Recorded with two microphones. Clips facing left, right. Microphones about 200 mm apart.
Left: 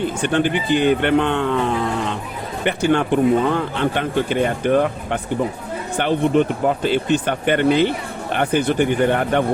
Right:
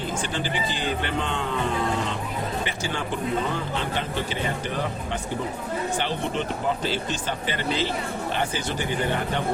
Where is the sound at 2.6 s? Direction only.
60° left (ahead or behind).